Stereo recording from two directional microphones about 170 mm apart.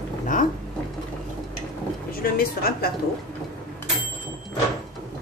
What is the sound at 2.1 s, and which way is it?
Speech, 60° left (ahead or behind).